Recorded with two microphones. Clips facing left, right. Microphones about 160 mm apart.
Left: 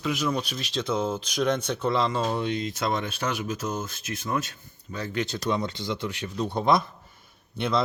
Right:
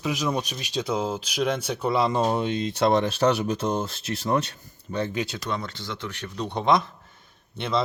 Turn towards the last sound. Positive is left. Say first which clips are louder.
# even
turn(degrees=0)  # may be behind; listen again after turning